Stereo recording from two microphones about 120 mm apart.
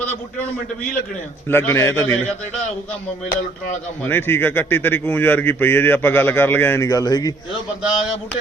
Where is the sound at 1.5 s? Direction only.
20° left (ahead or behind).